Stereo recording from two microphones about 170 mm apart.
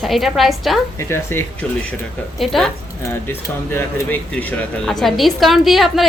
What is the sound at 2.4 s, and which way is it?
Speech, centre (ahead or behind).